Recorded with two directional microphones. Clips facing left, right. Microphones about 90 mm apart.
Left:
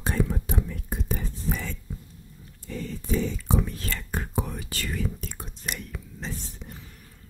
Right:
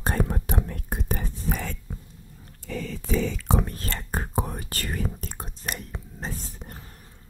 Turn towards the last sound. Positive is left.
turn(degrees=-45)  # may be behind; listen again after turning